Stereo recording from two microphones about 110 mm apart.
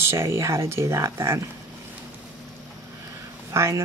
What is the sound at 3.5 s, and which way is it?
Speech, 25° right (ahead or behind).